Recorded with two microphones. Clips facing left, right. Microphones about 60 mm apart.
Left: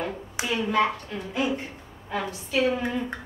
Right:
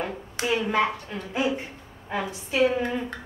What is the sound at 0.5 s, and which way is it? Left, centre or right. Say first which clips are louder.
A woman's voice: even; centre.